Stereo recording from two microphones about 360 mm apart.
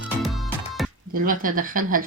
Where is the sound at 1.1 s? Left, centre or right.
Right.